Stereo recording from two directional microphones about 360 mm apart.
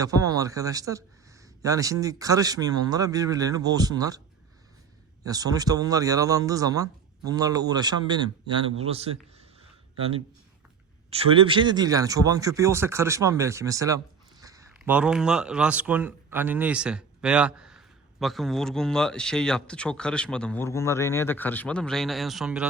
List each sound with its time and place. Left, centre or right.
0.0 s speech: centre
5.2 s speech: centre
11.1 s speech: centre